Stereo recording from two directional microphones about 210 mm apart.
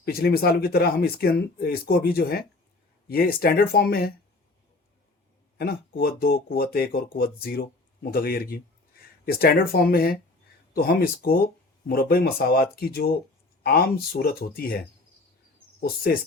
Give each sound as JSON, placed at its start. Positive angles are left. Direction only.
{"t": 0.0, "sound": "speech", "side_deg": 50}
{"t": 5.5, "sound": "speech", "side_deg": 45}